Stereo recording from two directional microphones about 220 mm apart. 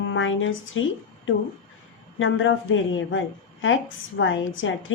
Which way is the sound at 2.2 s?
60° left (ahead or behind).